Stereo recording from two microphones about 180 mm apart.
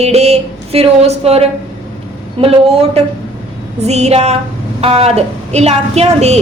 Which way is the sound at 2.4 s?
35° right (ahead or behind).